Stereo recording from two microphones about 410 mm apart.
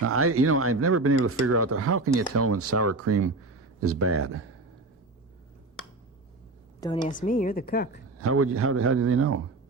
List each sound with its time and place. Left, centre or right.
0.0 s speech: right
6.7 s a woman's voice: centre
8.2 s speech: right